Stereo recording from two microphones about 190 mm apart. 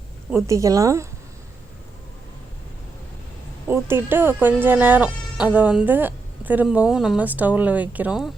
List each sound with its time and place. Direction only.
0.3 s speech: 15° right (ahead or behind)
3.7 s speech: 10° right (ahead or behind)